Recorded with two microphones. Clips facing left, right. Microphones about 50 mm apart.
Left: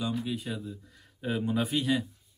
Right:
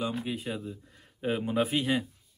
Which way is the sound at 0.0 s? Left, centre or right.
Right.